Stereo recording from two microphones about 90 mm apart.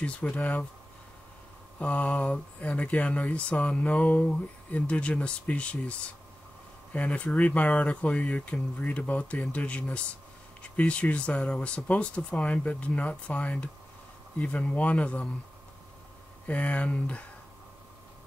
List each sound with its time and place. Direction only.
0.0 s speech: 10° left (ahead or behind)
1.8 s speech: 15° left (ahead or behind)
16.4 s speech: 15° left (ahead or behind)